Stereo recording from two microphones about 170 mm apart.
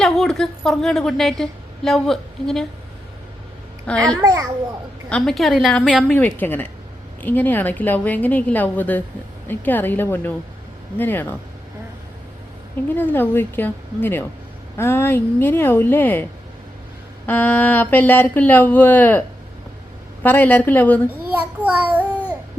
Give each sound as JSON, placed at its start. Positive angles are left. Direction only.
{"t": 0.0, "sound": "a woman's voice", "side_deg": 0}
{"t": 3.9, "sound": "speech", "side_deg": 5}
{"t": 4.2, "sound": "a child's voice", "side_deg": -20}
{"t": 5.0, "sound": "a woman's voice", "side_deg": 5}
{"t": 13.0, "sound": "speech", "side_deg": 10}
{"t": 17.2, "sound": "speech", "side_deg": 10}
{"t": 20.2, "sound": "speech", "side_deg": 10}
{"t": 21.3, "sound": "a child's voice", "side_deg": -10}